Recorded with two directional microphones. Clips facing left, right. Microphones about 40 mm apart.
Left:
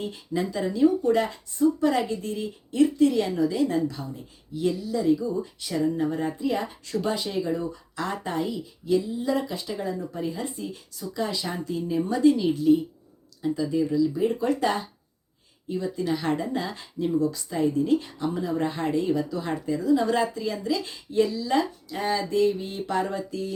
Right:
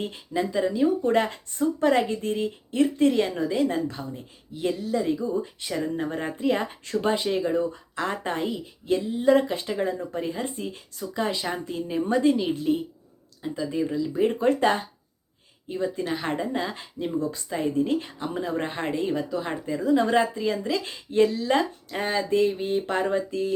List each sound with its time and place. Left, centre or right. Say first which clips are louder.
0.3 s speech: right 2 dB; right
1.0 s a woman's voice: even; right
12.3 s speech: left 1 dB; right
12.5 s a woman's voice: left 5 dB; right
13.4 s a woman's voice: left 3 dB; right